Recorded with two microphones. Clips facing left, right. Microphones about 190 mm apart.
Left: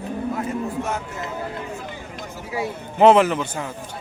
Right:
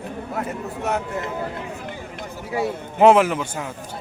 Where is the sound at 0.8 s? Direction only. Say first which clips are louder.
Right 2 dB; 65° right (ahead or behind).